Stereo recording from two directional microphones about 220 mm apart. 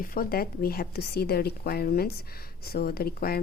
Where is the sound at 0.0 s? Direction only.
40° left (ahead or behind).